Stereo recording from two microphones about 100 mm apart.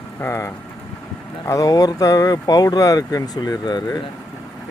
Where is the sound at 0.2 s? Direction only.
30° left (ahead or behind).